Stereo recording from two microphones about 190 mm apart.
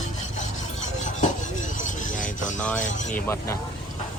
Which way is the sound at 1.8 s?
40° left (ahead or behind).